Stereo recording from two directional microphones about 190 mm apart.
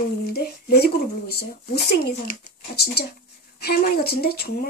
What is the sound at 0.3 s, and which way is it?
Speech, 55° left (ahead or behind).